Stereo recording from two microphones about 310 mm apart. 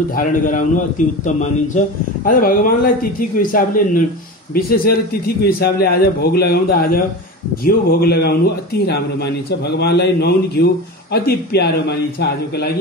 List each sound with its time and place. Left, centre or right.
0.1 s a man's voice: left